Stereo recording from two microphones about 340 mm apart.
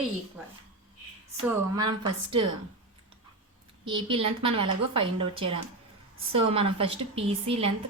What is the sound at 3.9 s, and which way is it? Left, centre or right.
A woman's voice, centre.